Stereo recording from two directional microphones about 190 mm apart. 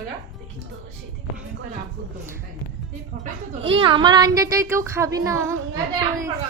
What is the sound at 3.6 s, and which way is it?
Speech, 30° right (ahead or behind).